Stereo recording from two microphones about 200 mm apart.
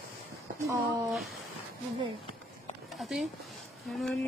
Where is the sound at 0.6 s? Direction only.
15° right (ahead or behind).